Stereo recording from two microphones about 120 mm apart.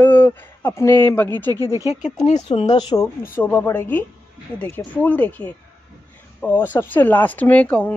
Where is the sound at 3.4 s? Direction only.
15° left (ahead or behind).